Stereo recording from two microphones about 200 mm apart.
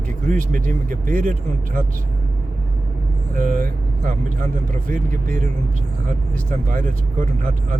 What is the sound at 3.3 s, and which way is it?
Speech, 40° right (ahead or behind).